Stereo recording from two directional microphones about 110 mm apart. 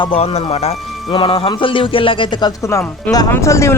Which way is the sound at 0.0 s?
60° left (ahead or behind).